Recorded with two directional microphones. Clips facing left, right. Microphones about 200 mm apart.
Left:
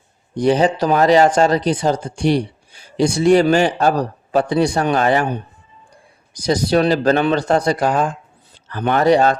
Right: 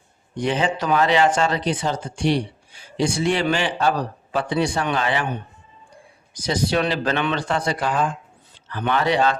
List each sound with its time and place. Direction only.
0.3 s speech: 40° left (ahead or behind)